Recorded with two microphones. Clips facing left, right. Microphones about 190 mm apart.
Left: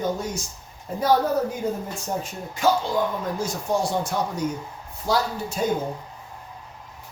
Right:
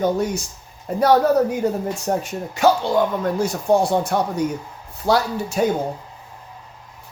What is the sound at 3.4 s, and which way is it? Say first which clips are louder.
Speech: right 7 dB; 60° right (ahead or behind).